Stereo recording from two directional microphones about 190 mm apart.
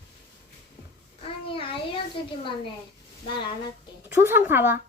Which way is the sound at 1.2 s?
30° left (ahead or behind).